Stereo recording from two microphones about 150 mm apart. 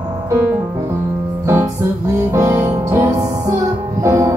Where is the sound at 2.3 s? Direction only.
20° right (ahead or behind).